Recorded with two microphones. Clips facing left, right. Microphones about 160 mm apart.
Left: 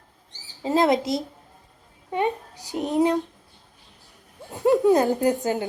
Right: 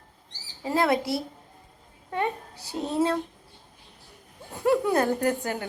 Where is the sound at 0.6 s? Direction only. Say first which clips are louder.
Left 4 dB; 20° left (ahead or behind).